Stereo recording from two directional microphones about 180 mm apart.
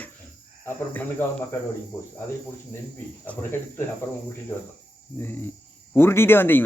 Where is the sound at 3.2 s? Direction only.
10° left (ahead or behind).